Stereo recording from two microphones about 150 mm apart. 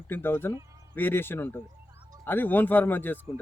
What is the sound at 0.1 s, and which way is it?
Speech, 15° left (ahead or behind).